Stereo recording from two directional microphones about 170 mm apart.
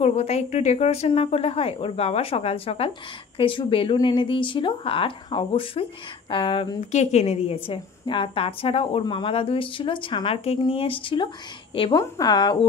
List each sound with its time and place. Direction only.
0.0 s a woman's voice: 35° left (ahead or behind)